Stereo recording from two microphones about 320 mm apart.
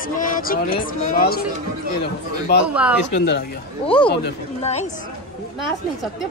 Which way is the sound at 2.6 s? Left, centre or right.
Centre.